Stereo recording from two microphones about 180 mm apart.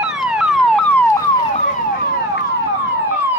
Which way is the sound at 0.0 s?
5° right (ahead or behind).